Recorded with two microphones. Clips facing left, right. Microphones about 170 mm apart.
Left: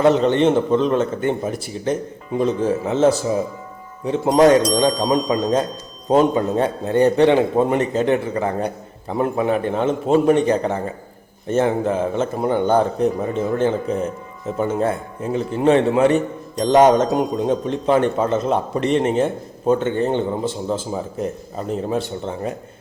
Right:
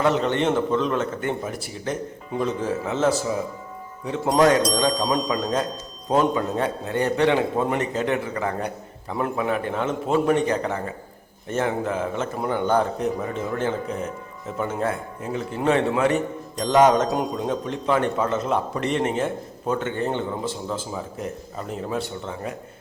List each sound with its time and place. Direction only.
0.0 s speech: 25° left (ahead or behind)